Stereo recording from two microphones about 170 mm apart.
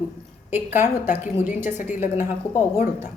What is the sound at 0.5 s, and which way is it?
Speech, 10° right (ahead or behind).